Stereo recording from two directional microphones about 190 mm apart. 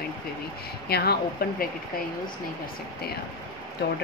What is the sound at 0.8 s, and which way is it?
Speech, 55° left (ahead or behind).